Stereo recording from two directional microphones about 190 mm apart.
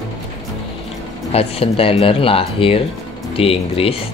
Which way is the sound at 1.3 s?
30° left (ahead or behind).